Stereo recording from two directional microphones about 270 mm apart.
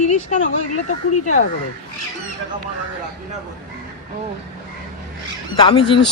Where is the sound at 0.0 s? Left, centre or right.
Left.